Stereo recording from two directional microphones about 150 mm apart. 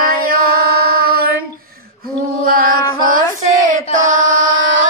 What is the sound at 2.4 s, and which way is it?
Mantra, 75° right (ahead or behind).